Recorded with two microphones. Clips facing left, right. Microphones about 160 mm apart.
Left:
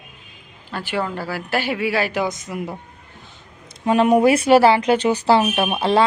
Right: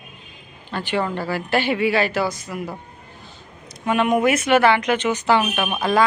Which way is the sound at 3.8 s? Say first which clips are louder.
Left 4 dB; 35° left (ahead or behind).